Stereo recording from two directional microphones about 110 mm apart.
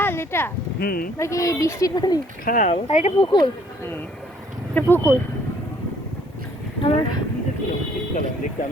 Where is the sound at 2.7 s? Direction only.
90° left.